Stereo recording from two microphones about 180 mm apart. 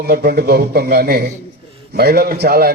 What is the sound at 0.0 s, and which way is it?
A man's voice, 60° right (ahead or behind).